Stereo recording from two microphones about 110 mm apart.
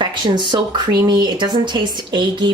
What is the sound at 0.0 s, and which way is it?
Speech, 45° right (ahead or behind).